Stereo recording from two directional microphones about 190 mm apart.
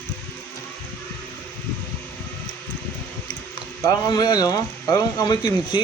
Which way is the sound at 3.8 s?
20° left (ahead or behind).